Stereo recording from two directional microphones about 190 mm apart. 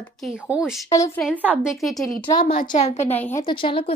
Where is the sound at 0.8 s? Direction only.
15° left (ahead or behind).